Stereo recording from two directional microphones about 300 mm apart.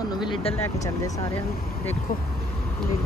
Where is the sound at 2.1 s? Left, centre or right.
Left.